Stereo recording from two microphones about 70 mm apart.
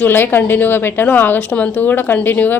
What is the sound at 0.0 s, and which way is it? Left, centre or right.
A woman's voice, left.